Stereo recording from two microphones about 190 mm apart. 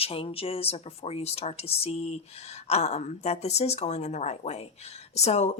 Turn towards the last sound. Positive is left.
turn(degrees=35)  # may be behind; listen again after turning